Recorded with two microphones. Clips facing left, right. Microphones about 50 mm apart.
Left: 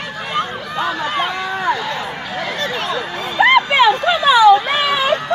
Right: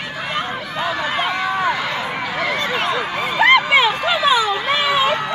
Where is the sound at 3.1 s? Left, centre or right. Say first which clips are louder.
Left 2 dB; centre.